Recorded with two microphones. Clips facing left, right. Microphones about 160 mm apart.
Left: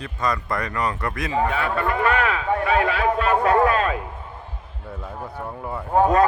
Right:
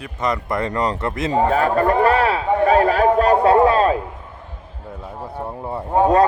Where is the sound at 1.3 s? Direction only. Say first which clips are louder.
Right 6 dB; 40° right (ahead or behind).